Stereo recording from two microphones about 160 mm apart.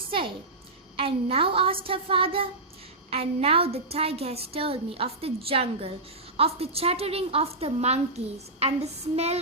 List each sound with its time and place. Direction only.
0.9 s a woman's voice: 35° right (ahead or behind)